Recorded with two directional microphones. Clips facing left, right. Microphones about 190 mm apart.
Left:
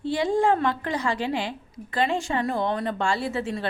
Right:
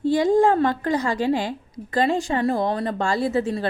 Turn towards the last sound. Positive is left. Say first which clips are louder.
# right 6 dB
turn(degrees=-40)  # may be behind; listen again after turning